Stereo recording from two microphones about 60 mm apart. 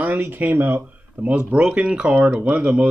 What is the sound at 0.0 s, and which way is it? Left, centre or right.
Speech, right.